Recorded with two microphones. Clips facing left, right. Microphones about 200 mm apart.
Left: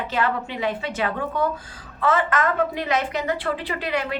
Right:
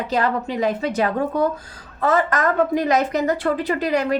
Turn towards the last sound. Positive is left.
turn(degrees=-40)  # may be behind; listen again after turning